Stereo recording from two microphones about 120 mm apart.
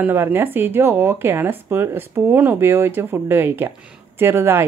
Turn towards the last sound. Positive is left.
turn(degrees=-20)  # may be behind; listen again after turning